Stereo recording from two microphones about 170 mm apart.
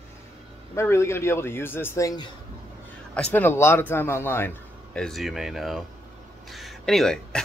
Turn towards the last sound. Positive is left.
turn(degrees=0)  # may be behind; listen again after turning